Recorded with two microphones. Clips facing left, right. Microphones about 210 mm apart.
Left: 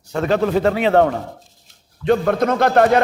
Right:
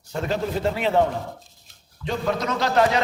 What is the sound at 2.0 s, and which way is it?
Speech, 55° left (ahead or behind).